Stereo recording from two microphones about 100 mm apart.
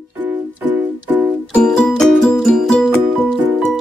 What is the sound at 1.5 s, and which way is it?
Music, 10° left (ahead or behind).